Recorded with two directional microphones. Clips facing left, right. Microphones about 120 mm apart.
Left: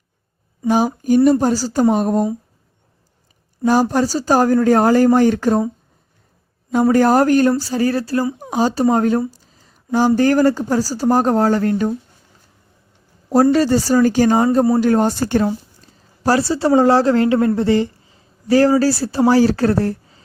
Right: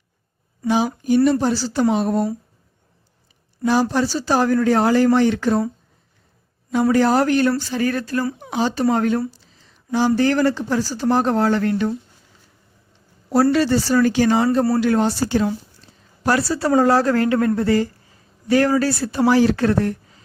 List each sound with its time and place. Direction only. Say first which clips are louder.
1.0 s speech: left 3 dB; 45° left (ahead or behind)
3.7 s speech: left 3 dB; 45° left (ahead or behind)
6.9 s speech: left 4 dB; 45° left (ahead or behind)
9.3 s a sound: left 2 dB; 45° left (ahead or behind)
10.2 s speech: left 4 dB; 45° left (ahead or behind)
13.3 s speech: left 3 dB; 40° left (ahead or behind)
15.4 s speech: left 2 dB; 35° left (ahead or behind)